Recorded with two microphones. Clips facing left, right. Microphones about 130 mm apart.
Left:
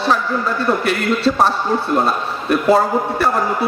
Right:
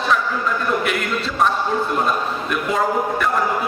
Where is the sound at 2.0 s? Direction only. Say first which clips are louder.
Left 2 dB; 35° left (ahead or behind).